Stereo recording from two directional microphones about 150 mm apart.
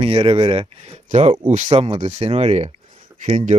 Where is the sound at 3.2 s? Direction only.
55° right (ahead or behind).